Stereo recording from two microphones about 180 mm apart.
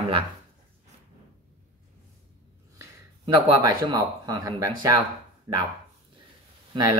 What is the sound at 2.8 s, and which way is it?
Speech, 20° right (ahead or behind).